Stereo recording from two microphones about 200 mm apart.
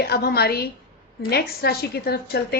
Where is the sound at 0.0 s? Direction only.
50° left (ahead or behind).